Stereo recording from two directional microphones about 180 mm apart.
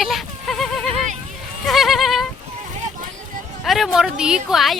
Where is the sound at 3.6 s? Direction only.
Centre (ahead or behind).